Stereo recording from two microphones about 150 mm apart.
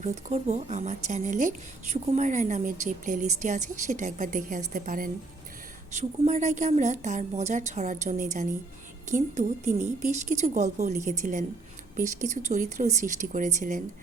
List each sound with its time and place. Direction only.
0.0 s a woman's voice: 50° right (ahead or behind)
5.9 s a woman's voice: 50° right (ahead or behind)